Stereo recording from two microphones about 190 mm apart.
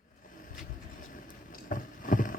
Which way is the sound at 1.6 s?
45° left (ahead or behind).